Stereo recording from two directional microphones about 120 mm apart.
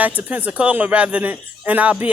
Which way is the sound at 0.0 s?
15° right (ahead or behind).